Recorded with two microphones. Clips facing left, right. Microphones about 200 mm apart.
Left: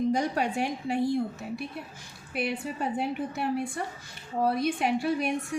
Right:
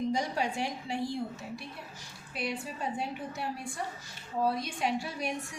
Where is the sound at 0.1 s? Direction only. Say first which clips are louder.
Left 4 dB; 55° left (ahead or behind).